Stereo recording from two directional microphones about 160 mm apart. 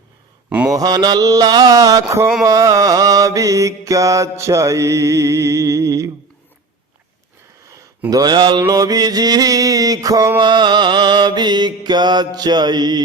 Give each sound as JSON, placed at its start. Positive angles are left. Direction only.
{"t": 0.7, "sound": "mantra", "side_deg": -25}
{"t": 7.7, "sound": "mantra", "side_deg": -20}